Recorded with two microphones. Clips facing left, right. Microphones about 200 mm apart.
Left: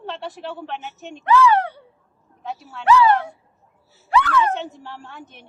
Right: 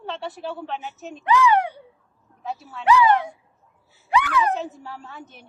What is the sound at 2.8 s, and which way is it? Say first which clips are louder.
Speech: left 2 dB; 15° right (ahead or behind).